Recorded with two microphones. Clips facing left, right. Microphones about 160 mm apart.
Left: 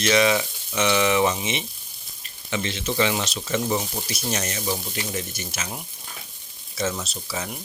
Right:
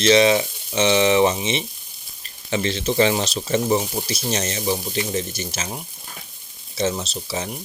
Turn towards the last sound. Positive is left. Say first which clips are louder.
# right 4 dB
turn(degrees=-30)  # may be behind; listen again after turning